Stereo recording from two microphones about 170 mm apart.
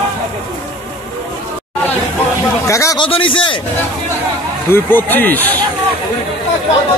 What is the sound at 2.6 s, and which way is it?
Speech, 15° left (ahead or behind).